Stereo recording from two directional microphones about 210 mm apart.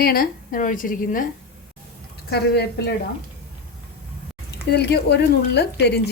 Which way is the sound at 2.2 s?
50° left (ahead or behind).